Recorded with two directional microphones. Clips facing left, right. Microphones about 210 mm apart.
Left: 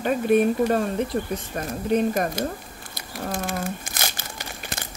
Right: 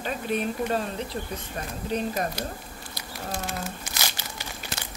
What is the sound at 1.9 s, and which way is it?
Speech, 50° left (ahead or behind).